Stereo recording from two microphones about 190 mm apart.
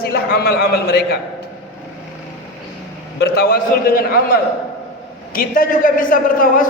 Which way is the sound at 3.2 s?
55° left (ahead or behind).